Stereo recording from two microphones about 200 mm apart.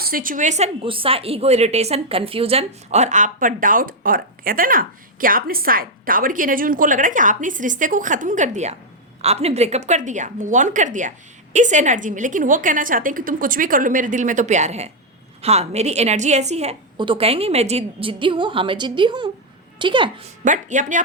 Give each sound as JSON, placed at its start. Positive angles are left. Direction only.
{"t": 0.0, "sound": "a woman's voice", "side_deg": -45}
{"t": 20.4, "sound": "a woman's voice", "side_deg": -40}